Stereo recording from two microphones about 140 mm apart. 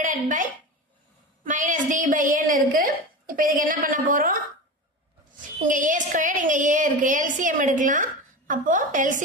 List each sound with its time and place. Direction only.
0.0 s a woman's voice: 70° right (ahead or behind)
1.5 s a woman's voice: 65° right (ahead or behind); by 4.4 s 80° right
5.6 s a woman's voice: 65° right (ahead or behind)